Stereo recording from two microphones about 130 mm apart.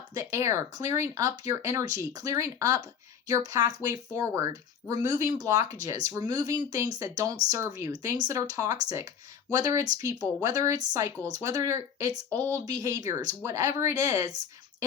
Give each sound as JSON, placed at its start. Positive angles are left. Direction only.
{"t": 0.1, "sound": "speech", "side_deg": -25}